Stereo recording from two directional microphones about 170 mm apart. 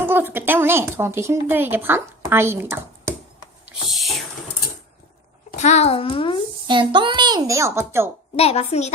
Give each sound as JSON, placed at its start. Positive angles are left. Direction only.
{"t": 0.0, "sound": "a woman's voice", "side_deg": -15}
{"t": 3.8, "sound": "whispering", "side_deg": 0}
{"t": 5.5, "sound": "a child's voice", "side_deg": 40}
{"t": 6.7, "sound": "a child's voice", "side_deg": -30}
{"t": 8.4, "sound": "a child's voice", "side_deg": 35}